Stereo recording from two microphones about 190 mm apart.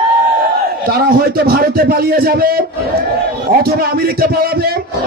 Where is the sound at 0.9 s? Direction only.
50° right (ahead or behind).